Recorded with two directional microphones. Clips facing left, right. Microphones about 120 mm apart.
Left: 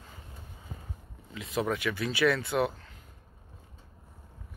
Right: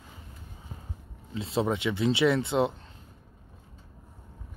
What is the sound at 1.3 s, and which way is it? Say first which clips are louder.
Speech: right 3 dB; 30° right (ahead or behind).